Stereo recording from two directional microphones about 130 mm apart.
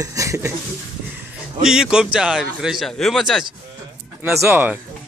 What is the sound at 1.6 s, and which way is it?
A man's voice, 5° right (ahead or behind).